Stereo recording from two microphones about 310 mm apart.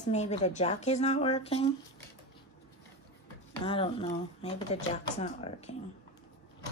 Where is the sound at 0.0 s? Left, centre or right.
Left.